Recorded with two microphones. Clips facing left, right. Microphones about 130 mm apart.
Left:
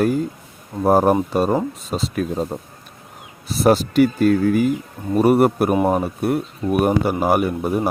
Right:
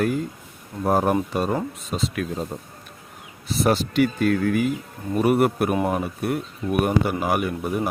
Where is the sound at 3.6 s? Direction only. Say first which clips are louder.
Left 6 dB; 40° left (ahead or behind).